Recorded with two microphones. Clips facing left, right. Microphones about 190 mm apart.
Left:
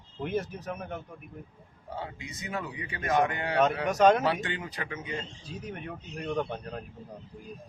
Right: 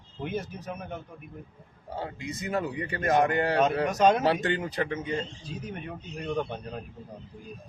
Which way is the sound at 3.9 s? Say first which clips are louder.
Left 2 dB; centre (ahead or behind).